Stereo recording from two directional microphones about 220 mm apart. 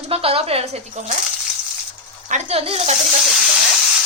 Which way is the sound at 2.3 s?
25° right (ahead or behind).